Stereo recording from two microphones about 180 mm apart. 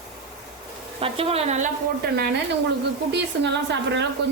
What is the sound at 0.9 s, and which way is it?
Speech, 30° right (ahead or behind).